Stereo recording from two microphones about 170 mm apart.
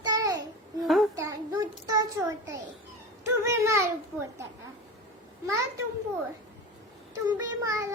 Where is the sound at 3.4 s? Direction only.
15° right (ahead or behind).